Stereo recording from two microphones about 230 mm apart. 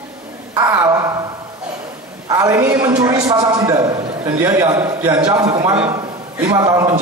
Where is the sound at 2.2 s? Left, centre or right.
Centre.